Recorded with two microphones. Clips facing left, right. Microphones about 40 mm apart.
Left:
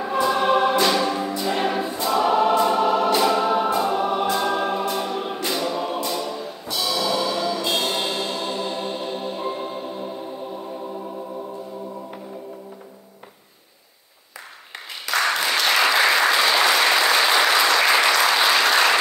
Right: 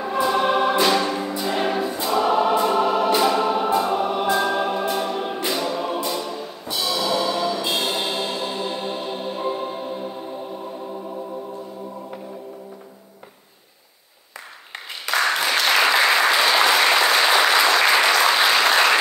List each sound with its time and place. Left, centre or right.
0.0 s choir: centre
6.0 s music: centre
15.1 s applause: right
15.7 s applause: centre